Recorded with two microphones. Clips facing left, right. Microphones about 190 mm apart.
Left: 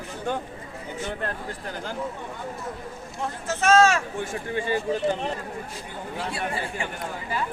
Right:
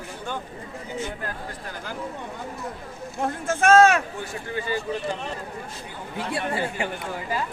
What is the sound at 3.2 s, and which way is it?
Speech, 55° right (ahead or behind).